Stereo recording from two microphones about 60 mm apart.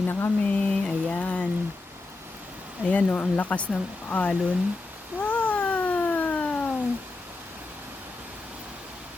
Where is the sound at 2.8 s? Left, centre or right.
Left.